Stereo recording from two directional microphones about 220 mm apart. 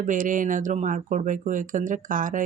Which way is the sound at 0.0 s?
35° right (ahead or behind).